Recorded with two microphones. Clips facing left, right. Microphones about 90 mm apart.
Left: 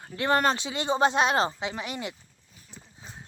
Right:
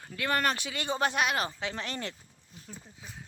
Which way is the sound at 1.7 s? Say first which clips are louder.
Left 2 dB; 10° left (ahead or behind).